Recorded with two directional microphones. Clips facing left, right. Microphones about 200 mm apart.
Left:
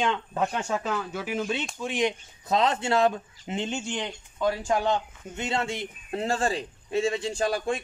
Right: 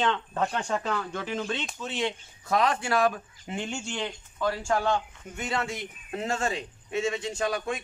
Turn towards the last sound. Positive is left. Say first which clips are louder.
# left 3 dB
turn(degrees=30)  # may be behind; listen again after turning